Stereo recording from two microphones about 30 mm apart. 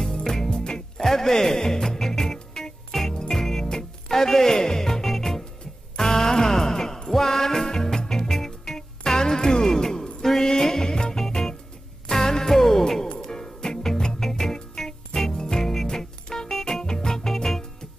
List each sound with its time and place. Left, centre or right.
0.0 s music: centre
1.0 s music: centre
3.1 s jingle: centre
3.6 s music: centre
15.1 s music: left
15.6 s music: centre
15.9 s music: left